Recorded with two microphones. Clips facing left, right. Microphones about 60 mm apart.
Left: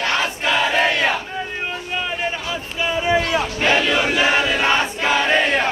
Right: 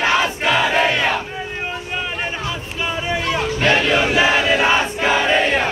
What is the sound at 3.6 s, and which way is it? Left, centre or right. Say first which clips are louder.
Battle cry: right 2 dB; centre.